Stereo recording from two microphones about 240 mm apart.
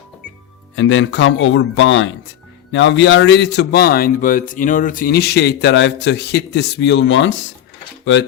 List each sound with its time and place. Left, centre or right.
0.8 s speech: left